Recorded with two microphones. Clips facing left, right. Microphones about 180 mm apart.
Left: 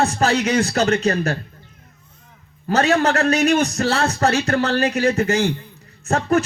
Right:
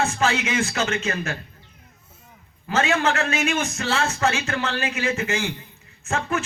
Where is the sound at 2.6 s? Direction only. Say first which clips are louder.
Left 5 dB; 40° left (ahead or behind).